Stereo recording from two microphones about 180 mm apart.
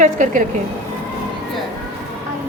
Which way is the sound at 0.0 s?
45° right (ahead or behind).